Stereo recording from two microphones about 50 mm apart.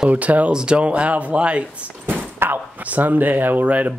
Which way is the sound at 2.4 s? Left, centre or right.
Right.